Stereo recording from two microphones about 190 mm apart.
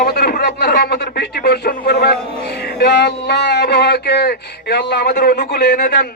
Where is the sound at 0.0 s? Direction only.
55° left (ahead or behind).